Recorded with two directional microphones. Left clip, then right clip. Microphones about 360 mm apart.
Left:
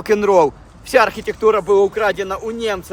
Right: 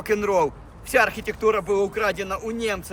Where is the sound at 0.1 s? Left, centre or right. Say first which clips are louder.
Left 8 dB; centre.